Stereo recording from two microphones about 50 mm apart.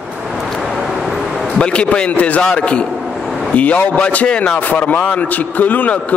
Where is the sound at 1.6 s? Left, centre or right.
Left.